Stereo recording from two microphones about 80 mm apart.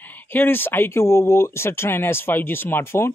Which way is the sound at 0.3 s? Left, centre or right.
Left.